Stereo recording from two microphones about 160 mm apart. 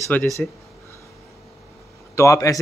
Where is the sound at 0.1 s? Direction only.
10° left (ahead or behind).